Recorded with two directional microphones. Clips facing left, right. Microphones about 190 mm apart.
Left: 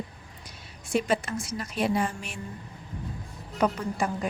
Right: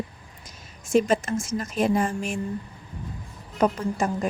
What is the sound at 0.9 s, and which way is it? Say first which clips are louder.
A woman's voice: right 5 dB; 45° right (ahead or behind).